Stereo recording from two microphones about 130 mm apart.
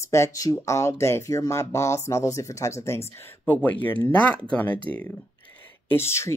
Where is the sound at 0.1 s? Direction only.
25° left (ahead or behind).